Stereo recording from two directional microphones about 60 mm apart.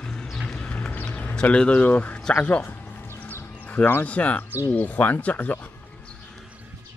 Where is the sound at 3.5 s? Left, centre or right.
Left.